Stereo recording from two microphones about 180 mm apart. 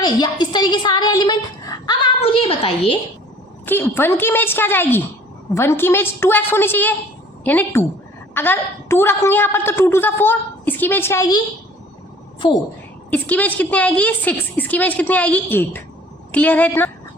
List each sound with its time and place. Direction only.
0.0 s a woman's voice: 25° left (ahead or behind)
2.2 s a sound: 30° left (ahead or behind)
3.7 s a woman's voice: 10° left (ahead or behind)
12.4 s a woman's voice: 25° left (ahead or behind)
13.1 s a woman's voice: 10° left (ahead or behind)